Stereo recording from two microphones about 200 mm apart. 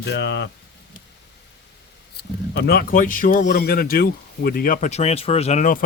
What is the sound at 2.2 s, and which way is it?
Speech, 55° left (ahead or behind).